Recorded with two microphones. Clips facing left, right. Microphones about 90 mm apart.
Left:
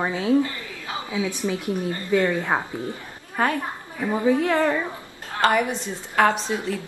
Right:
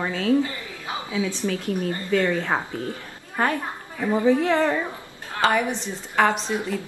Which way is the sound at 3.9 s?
5° left (ahead or behind).